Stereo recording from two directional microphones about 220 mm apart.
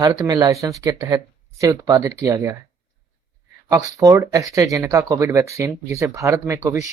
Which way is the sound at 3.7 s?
15° right (ahead or behind).